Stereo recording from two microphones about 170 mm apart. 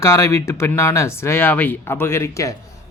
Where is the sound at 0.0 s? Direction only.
20° left (ahead or behind).